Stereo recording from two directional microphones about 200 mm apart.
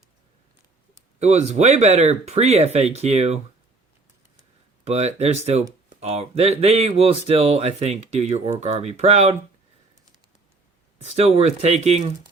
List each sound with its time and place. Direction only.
1.2 s speech: 35° right (ahead or behind)
4.9 s speech: 35° right (ahead or behind)
11.3 s speech: 30° right (ahead or behind)